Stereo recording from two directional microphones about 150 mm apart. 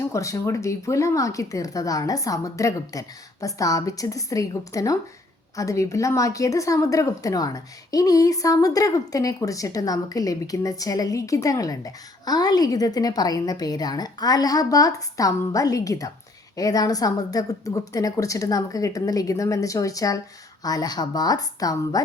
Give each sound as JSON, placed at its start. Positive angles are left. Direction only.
{"t": 0.1, "sound": "speech", "side_deg": 20}